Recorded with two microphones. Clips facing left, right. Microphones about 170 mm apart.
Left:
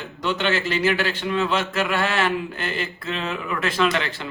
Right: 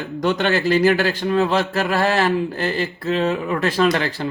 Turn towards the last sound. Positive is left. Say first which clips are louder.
# right 4 dB
turn(degrees=-40)  # may be behind; listen again after turning